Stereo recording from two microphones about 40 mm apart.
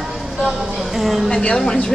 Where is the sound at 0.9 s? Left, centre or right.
Centre.